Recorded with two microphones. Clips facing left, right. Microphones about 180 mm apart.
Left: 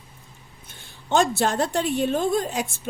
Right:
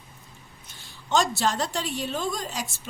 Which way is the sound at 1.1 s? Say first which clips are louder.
Left 3 dB; 55° left (ahead or behind).